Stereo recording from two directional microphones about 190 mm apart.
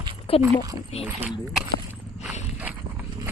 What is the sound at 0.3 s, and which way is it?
Speech, 30° left (ahead or behind).